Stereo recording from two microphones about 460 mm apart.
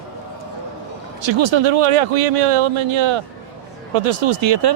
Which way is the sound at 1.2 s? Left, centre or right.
Right.